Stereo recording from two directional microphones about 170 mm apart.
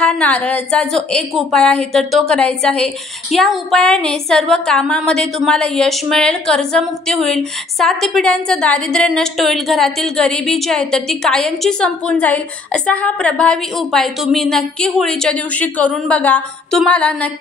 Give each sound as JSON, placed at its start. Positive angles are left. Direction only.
{"t": 0.0, "sound": "a woman's voice", "side_deg": 10}